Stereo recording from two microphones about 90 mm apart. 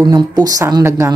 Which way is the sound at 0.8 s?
35° right (ahead or behind).